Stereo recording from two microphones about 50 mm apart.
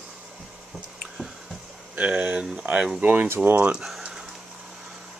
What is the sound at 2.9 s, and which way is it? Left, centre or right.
Speech, right.